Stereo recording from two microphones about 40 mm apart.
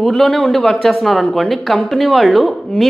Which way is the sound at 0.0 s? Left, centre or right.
Centre.